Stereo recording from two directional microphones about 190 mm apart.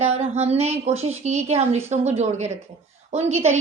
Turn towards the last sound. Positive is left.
turn(degrees=-35)  # may be behind; listen again after turning